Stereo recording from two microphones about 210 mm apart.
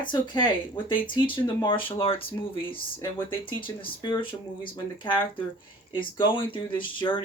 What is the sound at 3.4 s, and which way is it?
Speech, 25° left (ahead or behind).